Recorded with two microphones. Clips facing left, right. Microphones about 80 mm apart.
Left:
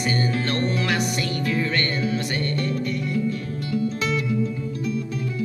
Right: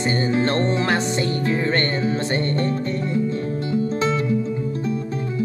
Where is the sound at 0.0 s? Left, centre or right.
Right.